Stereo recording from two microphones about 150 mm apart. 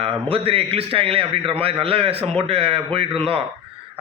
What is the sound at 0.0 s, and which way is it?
A man's voice, 40° right (ahead or behind).